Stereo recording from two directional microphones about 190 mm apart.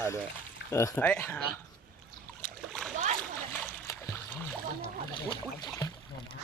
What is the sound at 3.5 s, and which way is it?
Splash, 10° left (ahead or behind).